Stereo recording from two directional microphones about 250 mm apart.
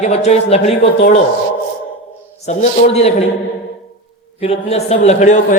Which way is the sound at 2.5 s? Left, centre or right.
Left.